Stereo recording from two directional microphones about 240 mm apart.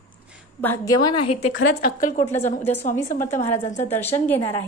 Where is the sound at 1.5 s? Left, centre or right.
Left.